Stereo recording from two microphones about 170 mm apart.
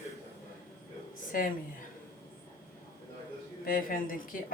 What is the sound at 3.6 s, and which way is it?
Speech, 55° left (ahead or behind).